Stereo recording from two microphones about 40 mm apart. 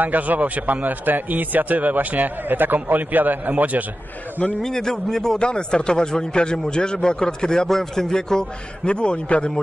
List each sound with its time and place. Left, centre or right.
0.0 s a man's voice: right
4.6 s a man's voice: centre
8.8 s a man's voice: left